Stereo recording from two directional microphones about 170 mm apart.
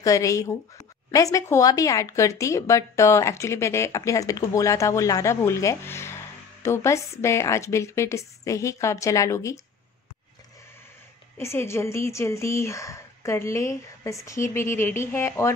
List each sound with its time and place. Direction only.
0.0 s speech: 20° left (ahead or behind)
11.3 s speech: 15° left (ahead or behind)